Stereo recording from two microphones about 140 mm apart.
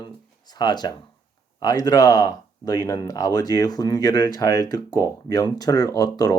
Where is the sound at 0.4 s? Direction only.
30° left (ahead or behind).